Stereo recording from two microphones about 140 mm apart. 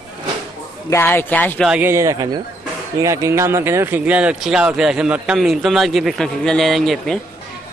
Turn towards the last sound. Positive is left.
turn(degrees=0)  # may be behind; listen again after turning